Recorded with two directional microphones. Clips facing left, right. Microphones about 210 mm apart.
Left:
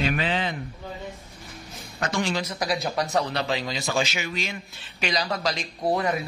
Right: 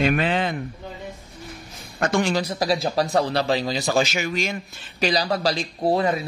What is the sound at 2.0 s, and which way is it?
Speech, 55° right (ahead or behind).